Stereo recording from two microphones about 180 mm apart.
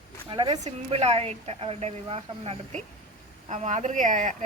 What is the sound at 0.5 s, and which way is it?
A woman's voice, 35° right (ahead or behind).